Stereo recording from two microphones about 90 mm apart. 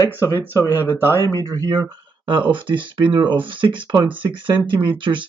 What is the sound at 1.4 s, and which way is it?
Speech, 40° right (ahead or behind).